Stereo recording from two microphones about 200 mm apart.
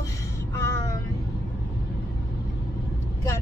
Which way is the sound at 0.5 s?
15° left (ahead or behind).